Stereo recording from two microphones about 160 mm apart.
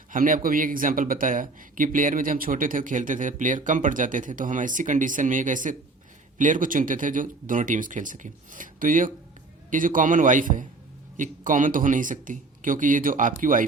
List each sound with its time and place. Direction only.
0.1 s speech: 60° right (ahead or behind)